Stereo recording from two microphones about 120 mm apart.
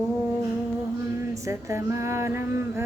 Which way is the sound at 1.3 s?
25° right (ahead or behind).